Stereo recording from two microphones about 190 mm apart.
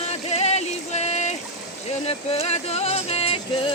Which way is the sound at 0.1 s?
35° left (ahead or behind).